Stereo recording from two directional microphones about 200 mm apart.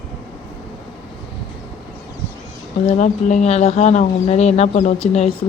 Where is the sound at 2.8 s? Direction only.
35° left (ahead or behind).